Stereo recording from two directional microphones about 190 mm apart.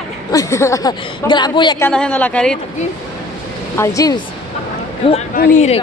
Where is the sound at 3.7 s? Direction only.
15° left (ahead or behind).